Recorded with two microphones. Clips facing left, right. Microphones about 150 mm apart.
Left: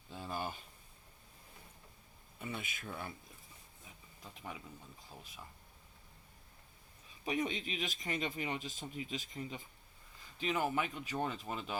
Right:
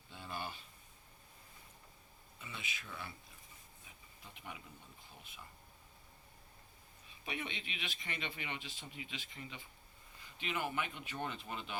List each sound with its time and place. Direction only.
0.1 s a sound: 40° left (ahead or behind)
2.4 s speech: 50° left (ahead or behind)
7.3 s speech: 40° left (ahead or behind)